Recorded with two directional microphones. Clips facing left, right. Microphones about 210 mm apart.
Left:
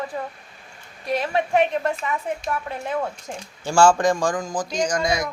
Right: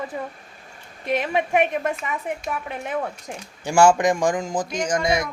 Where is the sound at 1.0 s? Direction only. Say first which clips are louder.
Even; 20° right (ahead or behind).